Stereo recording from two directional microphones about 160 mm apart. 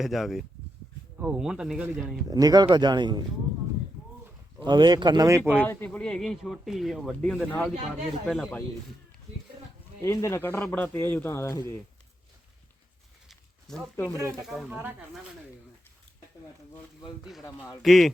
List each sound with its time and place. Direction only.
0.0 s speech: centre (ahead or behind)
2.3 s speech: 25° right (ahead or behind)
4.6 s speech: 25° right (ahead or behind)
5.6 s speech: 10° left (ahead or behind)
10.0 s speech: 20° left (ahead or behind)
13.2 s a sound: centre (ahead or behind)
13.9 s speech: 15° left (ahead or behind)
14.4 s speech: 5° right (ahead or behind)
17.4 s speech: 15° left (ahead or behind)
17.8 s speech: centre (ahead or behind)